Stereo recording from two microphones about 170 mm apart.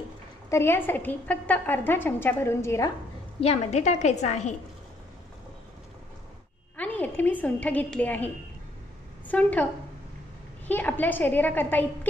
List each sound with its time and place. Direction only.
0.5 s a woman's voice: 15° left (ahead or behind)
3.3 s a woman's voice: 40° left (ahead or behind)
6.8 s a woman's voice: 10° left (ahead or behind)
9.3 s a woman's voice: 10° left (ahead or behind)
10.7 s a woman's voice: 10° left (ahead or behind)